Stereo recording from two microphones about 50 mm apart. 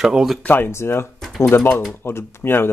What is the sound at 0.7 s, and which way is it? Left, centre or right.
Speech, left.